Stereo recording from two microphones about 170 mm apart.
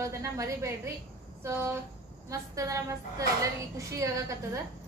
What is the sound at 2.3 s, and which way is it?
A woman's voice, 20° right (ahead or behind).